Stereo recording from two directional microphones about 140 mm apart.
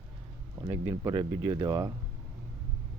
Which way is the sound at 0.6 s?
30° right (ahead or behind).